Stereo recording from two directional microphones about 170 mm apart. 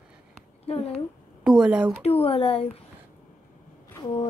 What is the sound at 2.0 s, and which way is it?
Speech, 35° left (ahead or behind).